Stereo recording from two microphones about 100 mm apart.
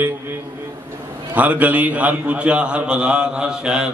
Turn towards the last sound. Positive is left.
turn(degrees=-10)  # may be behind; listen again after turning